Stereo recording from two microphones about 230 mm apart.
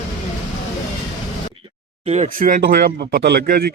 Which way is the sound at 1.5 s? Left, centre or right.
Right.